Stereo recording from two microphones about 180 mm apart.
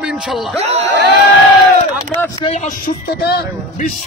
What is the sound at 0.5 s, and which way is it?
Speech, 35° right (ahead or behind).